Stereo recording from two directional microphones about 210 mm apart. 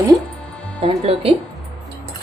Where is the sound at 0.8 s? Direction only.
30° right (ahead or behind).